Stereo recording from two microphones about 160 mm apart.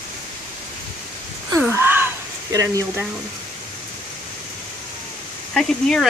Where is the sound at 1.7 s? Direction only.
15° right (ahead or behind).